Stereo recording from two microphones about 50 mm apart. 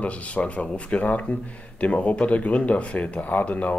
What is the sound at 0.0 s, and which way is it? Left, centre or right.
Speech, left.